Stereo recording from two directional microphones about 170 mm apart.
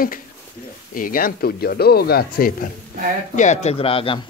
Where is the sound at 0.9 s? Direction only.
55° left (ahead or behind).